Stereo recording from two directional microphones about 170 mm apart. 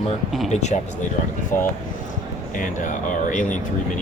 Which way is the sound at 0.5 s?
45° left (ahead or behind).